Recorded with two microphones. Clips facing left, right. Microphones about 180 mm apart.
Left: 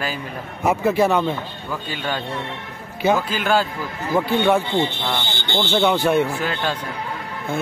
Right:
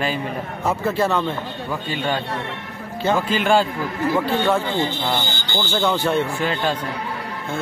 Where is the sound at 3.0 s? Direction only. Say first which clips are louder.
Even; 10° left (ahead or behind).